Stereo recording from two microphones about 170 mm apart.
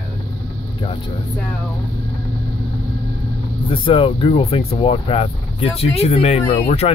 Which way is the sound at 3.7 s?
30° left (ahead or behind).